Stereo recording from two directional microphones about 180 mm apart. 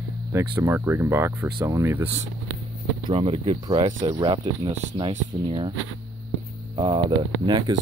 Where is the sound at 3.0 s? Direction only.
30° right (ahead or behind).